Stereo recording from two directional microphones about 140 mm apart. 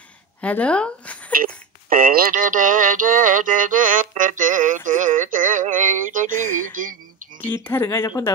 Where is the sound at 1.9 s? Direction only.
90° right; by 6.4 s 70° right (ahead or behind).